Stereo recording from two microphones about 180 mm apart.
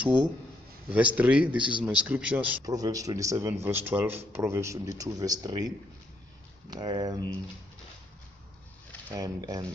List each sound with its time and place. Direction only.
0.8 s speech: 10° right (ahead or behind)
2.6 s speech: 20° right (ahead or behind)
6.7 s speech: 25° right (ahead or behind)
9.1 s speech: 20° right (ahead or behind)